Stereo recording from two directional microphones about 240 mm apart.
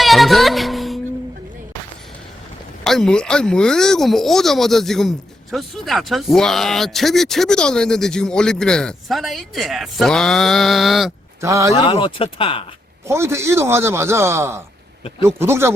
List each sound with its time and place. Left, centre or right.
0.0 s music: centre
2.8 s speech: centre
11.3 s speech: centre
11.7 s speech: left
13.1 s speech: centre